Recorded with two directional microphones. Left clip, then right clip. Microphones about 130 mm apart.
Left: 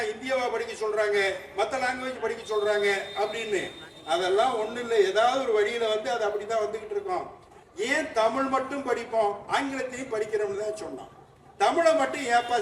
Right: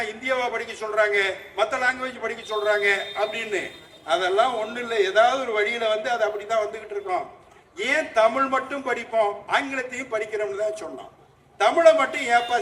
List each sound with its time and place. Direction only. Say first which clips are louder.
0.0 s a man's voice: right 3 dB; 20° right (ahead or behind)
7.8 s a man's voice: right 5 dB; 15° right (ahead or behind)